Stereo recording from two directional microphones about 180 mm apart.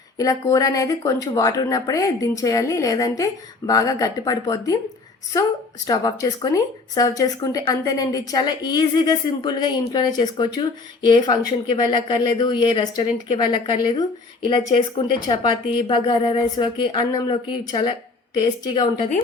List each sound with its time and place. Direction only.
0.2 s a woman's voice: 20° left (ahead or behind)